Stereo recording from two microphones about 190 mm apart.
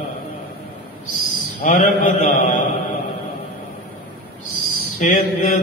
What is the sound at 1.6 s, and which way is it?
Mantra, 40° left (ahead or behind).